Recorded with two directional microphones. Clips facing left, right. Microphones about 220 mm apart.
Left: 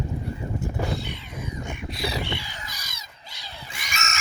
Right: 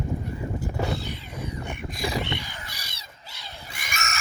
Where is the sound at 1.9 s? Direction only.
45° right (ahead or behind).